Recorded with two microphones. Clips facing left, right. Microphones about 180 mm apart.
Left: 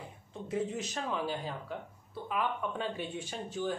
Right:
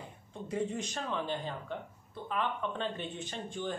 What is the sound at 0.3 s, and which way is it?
Speech, centre (ahead or behind).